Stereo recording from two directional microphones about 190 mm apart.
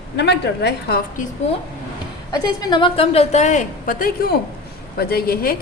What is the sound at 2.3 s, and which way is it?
A woman's voice, 20° left (ahead or behind).